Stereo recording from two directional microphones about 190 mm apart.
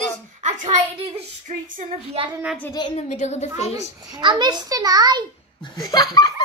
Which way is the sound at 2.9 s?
35° left (ahead or behind).